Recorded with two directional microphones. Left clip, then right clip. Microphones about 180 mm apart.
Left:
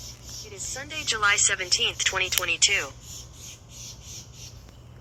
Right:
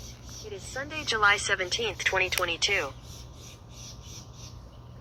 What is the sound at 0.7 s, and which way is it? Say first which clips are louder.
Speech: left 1 dB; 40° right (ahead or behind).